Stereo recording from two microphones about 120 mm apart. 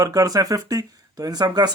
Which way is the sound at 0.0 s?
30° right (ahead or behind).